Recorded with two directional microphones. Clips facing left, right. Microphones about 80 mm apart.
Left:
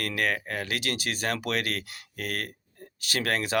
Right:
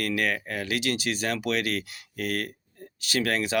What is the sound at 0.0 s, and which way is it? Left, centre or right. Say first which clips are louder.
Speech: right 1 dB; left.